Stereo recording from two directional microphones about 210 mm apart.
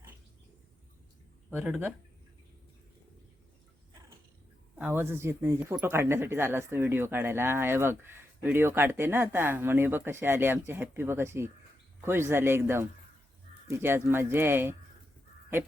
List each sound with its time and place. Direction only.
1.5 s speech: 5° right (ahead or behind)
4.8 s speech: 10° right (ahead or behind)